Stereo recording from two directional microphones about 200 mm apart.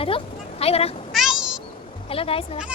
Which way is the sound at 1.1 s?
Centre (ahead or behind).